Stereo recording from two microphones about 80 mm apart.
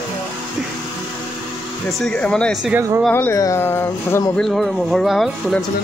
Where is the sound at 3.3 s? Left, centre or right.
Left.